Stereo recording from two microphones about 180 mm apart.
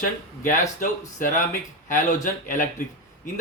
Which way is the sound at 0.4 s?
50° left (ahead or behind).